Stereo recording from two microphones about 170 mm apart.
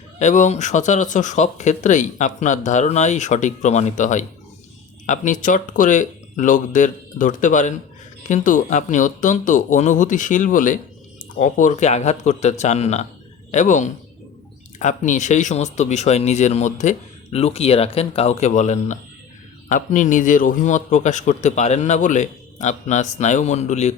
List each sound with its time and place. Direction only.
0.2 s a man's voice: 45° left (ahead or behind)